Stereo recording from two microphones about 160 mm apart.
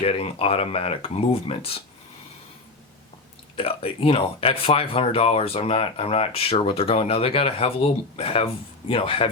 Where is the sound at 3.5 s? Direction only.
35° left (ahead or behind).